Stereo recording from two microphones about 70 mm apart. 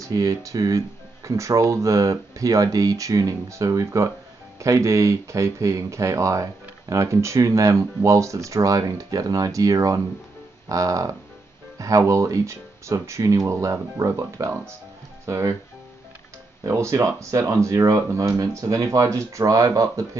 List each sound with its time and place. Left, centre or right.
0.0 s speech: right
16.6 s speech: right